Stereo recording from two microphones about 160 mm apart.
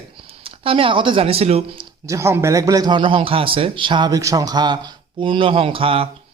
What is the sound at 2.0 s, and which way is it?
A man's voice, 20° right (ahead or behind).